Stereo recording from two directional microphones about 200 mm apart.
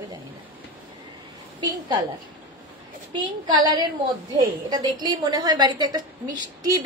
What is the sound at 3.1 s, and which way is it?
A woman's voice, 20° right (ahead or behind).